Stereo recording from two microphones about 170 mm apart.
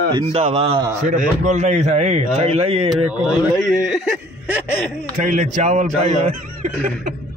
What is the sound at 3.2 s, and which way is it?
Speech, 5° right (ahead or behind).